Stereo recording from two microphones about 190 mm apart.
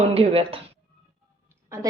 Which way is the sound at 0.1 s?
30° right (ahead or behind).